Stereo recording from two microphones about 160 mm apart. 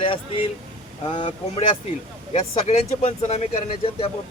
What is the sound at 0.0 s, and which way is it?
Speech, 35° left (ahead or behind).